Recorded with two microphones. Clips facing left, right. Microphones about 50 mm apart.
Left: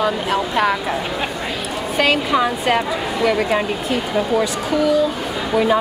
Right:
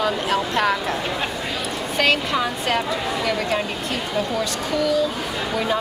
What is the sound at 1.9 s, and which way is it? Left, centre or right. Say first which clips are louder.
Speech: left 3 dB; centre.